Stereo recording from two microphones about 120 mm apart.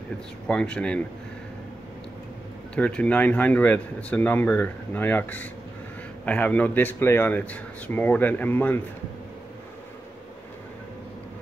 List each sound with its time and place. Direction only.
0.5 s speech: 10° left (ahead or behind)
2.7 s speech: 10° left (ahead or behind)